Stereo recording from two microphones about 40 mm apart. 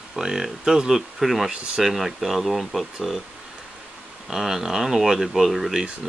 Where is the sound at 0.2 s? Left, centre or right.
Centre.